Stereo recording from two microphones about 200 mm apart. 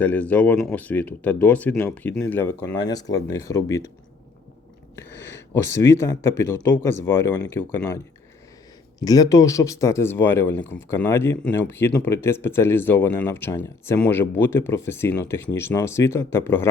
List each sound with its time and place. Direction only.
0.0 s speech: 10° left (ahead or behind)
4.9 s speech: 10° left (ahead or behind)